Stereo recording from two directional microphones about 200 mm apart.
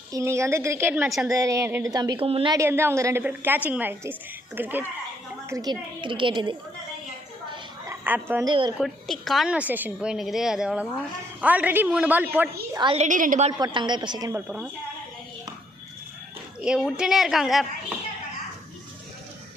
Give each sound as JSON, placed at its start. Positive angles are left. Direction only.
{"t": 0.1, "sound": "a woman's voice", "side_deg": -15}
{"t": 2.6, "sound": "a woman's voice", "side_deg": -10}
{"t": 7.5, "sound": "a sound", "side_deg": -10}
{"t": 8.4, "sound": "a woman's voice", "side_deg": -20}
{"t": 8.8, "sound": "a woman's voice", "side_deg": 0}
{"t": 12.7, "sound": "a woman's voice", "side_deg": -25}
{"t": 13.6, "sound": "a woman's voice", "side_deg": -20}
{"t": 14.4, "sound": "a woman's voice", "side_deg": -5}
{"t": 16.6, "sound": "a woman's voice", "side_deg": -5}